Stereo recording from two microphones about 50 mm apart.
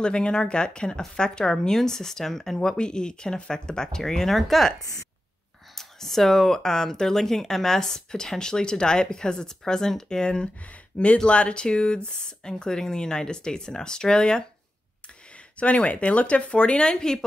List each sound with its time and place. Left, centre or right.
0.0 s a woman's voice: centre
5.8 s a woman's voice: centre
15.5 s speech: left